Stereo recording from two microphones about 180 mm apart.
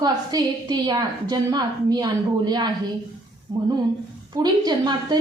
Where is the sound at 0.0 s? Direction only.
20° right (ahead or behind).